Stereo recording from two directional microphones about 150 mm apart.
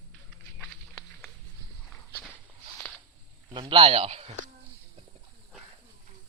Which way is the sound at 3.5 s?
30° right (ahead or behind).